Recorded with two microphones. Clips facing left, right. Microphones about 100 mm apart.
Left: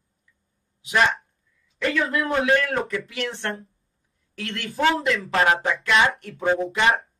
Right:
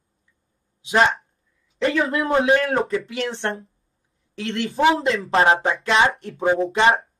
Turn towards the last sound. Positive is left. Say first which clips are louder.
# right 3 dB
turn(degrees=-30)  # may be behind; listen again after turning